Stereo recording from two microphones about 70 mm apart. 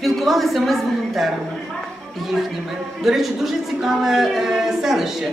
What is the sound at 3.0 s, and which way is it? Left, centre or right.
A man's voice, centre.